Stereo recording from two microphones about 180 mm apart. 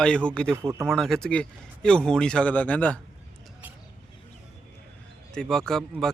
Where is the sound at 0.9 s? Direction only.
Centre (ahead or behind).